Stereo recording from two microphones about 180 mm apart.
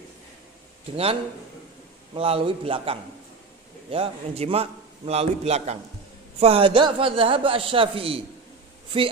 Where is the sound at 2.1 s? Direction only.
30° right (ahead or behind).